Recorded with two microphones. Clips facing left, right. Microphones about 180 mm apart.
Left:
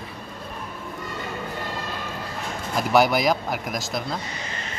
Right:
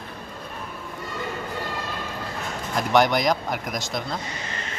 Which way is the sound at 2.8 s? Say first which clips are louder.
Left 1 dB; 5° left (ahead or behind).